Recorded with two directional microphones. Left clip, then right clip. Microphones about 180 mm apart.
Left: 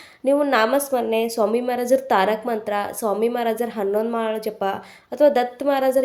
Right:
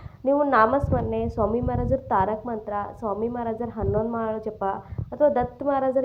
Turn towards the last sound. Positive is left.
turn(degrees=30)  # may be behind; listen again after turning